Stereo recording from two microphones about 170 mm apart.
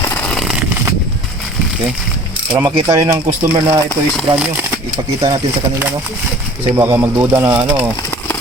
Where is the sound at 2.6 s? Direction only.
20° right (ahead or behind).